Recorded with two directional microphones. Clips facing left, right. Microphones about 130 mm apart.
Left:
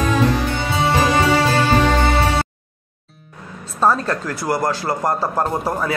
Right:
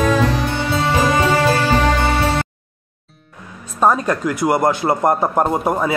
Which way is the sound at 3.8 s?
15° right (ahead or behind).